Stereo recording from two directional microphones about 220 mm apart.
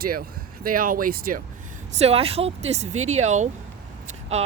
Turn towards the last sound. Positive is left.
turn(degrees=-30)  # may be behind; listen again after turning